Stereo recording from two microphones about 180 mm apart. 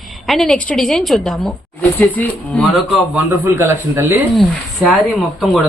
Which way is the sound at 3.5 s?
15° right (ahead or behind).